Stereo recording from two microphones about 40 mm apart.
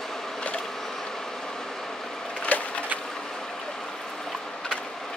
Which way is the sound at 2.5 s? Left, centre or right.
Left.